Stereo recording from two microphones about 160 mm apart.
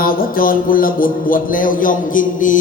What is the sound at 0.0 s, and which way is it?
Speech, 65° left (ahead or behind).